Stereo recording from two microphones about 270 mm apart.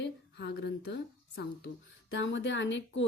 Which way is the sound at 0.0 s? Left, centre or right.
Left.